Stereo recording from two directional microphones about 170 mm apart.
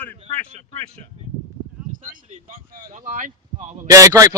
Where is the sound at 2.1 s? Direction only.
55° right (ahead or behind).